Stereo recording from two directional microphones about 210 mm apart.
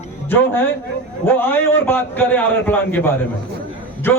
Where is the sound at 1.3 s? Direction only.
10° left (ahead or behind).